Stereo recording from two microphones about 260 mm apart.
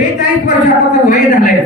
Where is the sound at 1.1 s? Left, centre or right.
Left.